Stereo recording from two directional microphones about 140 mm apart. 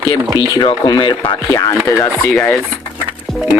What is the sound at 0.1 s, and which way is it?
Speech, 30° left (ahead or behind).